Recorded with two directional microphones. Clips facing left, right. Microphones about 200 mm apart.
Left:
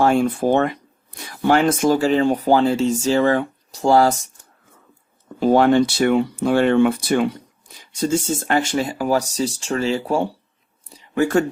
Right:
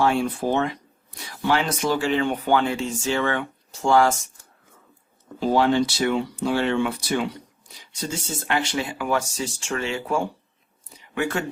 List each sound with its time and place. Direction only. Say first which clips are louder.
0.0 s speech: left 5 dB; 45° left (ahead or behind)
5.4 s speech: left 5 dB; 55° left (ahead or behind); by 10.2 s 35° left (ahead or behind)
10.9 s a sound: left 8 dB; 35° left (ahead or behind)